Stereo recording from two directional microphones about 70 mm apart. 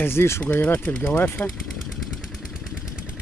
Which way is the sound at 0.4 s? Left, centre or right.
Left.